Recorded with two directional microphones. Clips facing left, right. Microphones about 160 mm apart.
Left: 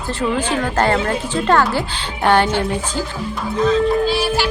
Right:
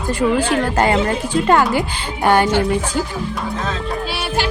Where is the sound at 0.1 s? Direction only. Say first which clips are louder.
Right 3 dB; 10° right (ahead or behind).